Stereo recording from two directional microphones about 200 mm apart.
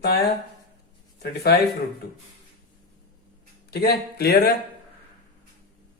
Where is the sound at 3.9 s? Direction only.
50° left (ahead or behind).